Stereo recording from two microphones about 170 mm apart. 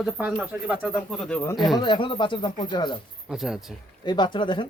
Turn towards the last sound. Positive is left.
turn(degrees=30)  # may be behind; listen again after turning